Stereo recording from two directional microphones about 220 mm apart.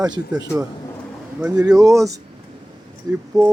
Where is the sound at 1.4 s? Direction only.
5° right (ahead or behind).